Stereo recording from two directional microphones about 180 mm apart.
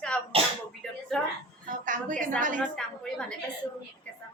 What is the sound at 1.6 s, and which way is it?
Speech, 45° right (ahead or behind).